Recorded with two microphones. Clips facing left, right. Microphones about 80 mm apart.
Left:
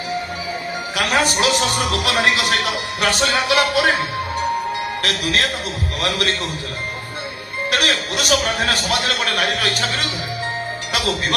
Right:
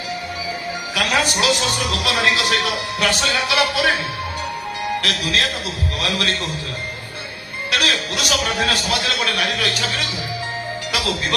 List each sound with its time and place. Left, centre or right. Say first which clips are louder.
0.9 s a man's voice: left 1 dB; left
5.0 s a man's voice: left 1 dB; left
7.7 s a man's voice: left 1 dB; left